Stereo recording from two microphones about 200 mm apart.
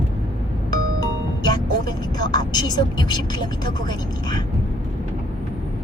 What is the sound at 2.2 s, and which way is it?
Vehicle, 20° left (ahead or behind).